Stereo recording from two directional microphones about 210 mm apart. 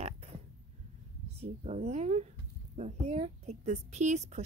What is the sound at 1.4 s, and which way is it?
A woman's voice, 30° right (ahead or behind).